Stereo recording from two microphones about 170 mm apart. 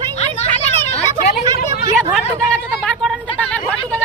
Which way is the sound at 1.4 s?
25° right (ahead or behind).